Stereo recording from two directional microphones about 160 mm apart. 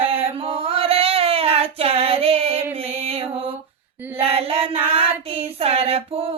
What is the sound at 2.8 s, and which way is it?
Music, 40° right (ahead or behind).